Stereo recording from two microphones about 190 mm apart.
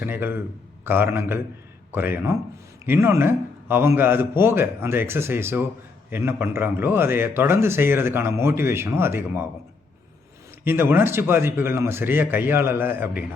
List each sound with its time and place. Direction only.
0.0 s a man's voice: 10° right (ahead or behind)
10.6 s a man's voice: 10° right (ahead or behind)